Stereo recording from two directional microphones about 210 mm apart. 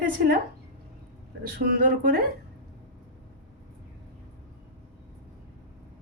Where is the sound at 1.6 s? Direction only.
45° right (ahead or behind).